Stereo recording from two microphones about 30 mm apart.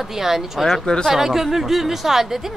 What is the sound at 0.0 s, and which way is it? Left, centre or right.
Speech, centre.